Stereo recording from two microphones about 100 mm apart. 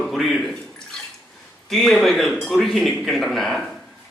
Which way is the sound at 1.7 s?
5° left (ahead or behind).